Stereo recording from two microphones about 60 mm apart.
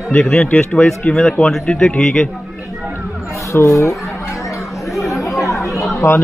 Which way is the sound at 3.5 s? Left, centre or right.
Left.